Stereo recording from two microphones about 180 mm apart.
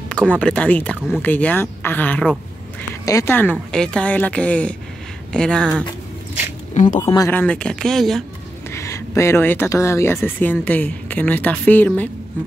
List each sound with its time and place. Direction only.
0.1 s a woman's voice: 5° left (ahead or behind)
6.7 s speech: 45° left (ahead or behind)
7.0 s a woman's voice: 20° left (ahead or behind); by 8.2 s centre (ahead or behind)
8.7 s a woman's voice: 15° left (ahead or behind)